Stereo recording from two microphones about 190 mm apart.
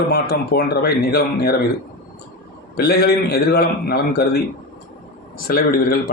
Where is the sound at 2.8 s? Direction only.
55° left (ahead or behind).